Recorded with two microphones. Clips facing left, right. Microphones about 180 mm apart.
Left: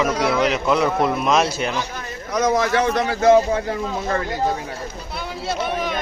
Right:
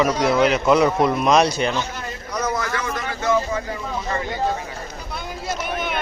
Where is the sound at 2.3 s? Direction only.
85° left.